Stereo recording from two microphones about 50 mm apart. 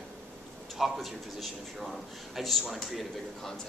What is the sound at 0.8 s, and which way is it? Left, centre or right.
A man's voice, centre.